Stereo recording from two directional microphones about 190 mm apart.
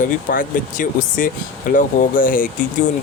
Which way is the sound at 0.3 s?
45° left (ahead or behind).